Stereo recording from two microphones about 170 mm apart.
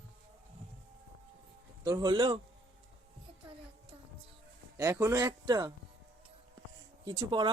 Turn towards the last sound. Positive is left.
turn(degrees=-25)  # may be behind; listen again after turning